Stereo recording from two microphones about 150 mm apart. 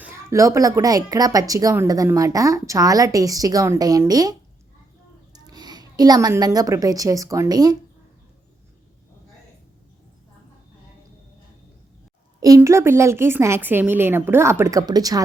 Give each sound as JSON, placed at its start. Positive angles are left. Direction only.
{"t": 0.0, "sound": "a woman's voice", "side_deg": -15}
{"t": 12.4, "sound": "a woman's voice", "side_deg": -20}